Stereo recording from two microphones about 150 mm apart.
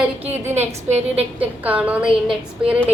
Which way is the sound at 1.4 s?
10° right (ahead or behind).